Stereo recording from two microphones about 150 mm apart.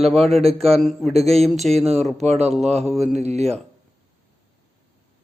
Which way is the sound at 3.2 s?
50° right (ahead or behind).